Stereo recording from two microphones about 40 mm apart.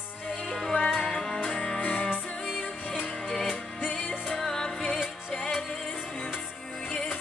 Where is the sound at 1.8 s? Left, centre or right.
Left.